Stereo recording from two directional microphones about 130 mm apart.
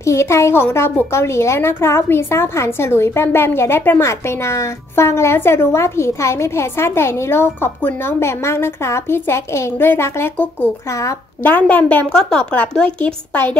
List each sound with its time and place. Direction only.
0.0 s a woman's voice: 20° left (ahead or behind)